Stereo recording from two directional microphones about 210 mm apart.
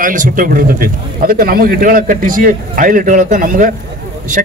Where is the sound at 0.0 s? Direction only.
40° right (ahead or behind).